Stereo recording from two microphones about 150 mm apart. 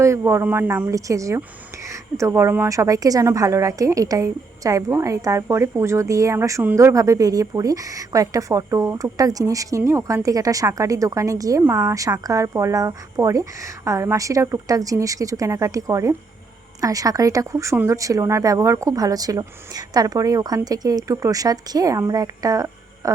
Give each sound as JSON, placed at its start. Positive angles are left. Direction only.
{"t": 0.0, "sound": "a woman's voice", "side_deg": -20}